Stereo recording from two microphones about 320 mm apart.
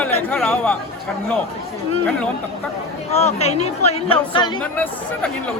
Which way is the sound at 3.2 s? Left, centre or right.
Centre.